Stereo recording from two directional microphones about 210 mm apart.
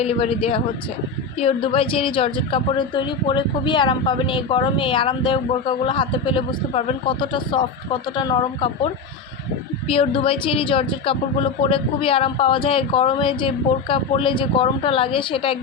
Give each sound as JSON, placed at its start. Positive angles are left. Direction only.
{"t": 0.0, "sound": "a woman's voice", "side_deg": 25}
{"t": 9.9, "sound": "a woman's voice", "side_deg": 25}